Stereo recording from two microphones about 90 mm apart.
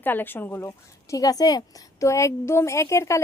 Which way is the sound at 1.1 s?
40° left (ahead or behind).